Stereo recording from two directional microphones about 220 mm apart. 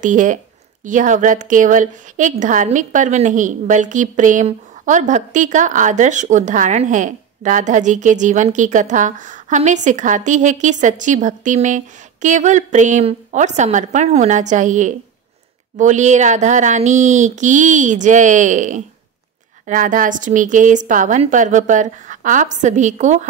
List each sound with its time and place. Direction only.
0.0 s a woman's voice: 35° right (ahead or behind)